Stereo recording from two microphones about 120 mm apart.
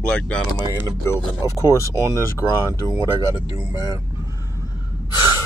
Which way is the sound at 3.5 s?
30° right (ahead or behind).